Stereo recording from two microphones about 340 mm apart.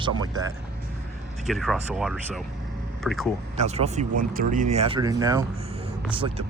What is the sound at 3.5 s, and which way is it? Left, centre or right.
Speech, centre.